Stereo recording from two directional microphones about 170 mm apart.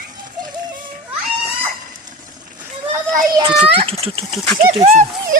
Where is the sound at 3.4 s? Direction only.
30° right (ahead or behind).